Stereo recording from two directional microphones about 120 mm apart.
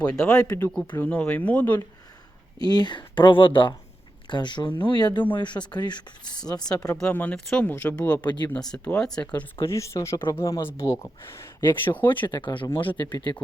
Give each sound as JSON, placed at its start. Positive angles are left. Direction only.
{"t": 0.0, "sound": "speech", "side_deg": 5}
{"t": 2.6, "sound": "speech", "side_deg": 35}
{"t": 7.0, "sound": "speech", "side_deg": 10}
{"t": 8.2, "sound": "speech", "side_deg": 40}
{"t": 8.5, "sound": "speech", "side_deg": 5}
{"t": 9.6, "sound": "speech", "side_deg": 25}
{"t": 12.2, "sound": "speech", "side_deg": 40}